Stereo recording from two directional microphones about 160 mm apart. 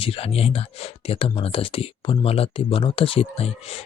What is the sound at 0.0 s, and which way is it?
Speech, 35° left (ahead or behind).